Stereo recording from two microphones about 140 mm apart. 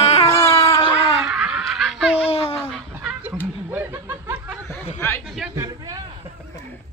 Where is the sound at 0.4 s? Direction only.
20° left (ahead or behind).